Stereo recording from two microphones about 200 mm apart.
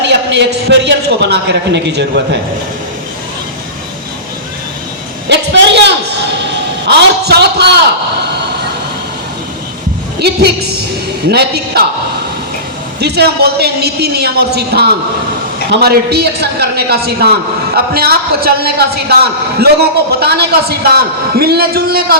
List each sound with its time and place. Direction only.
0.0 s a man's voice: 60° right (ahead or behind)
5.3 s a sound: 60° right (ahead or behind)
10.2 s a woman's voice: 55° right (ahead or behind)
13.0 s a man's voice: 55° right (ahead or behind)